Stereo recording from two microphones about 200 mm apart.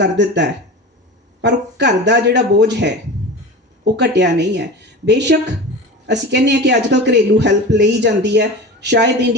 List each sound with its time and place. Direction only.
0.0 s speech: 60° right (ahead or behind)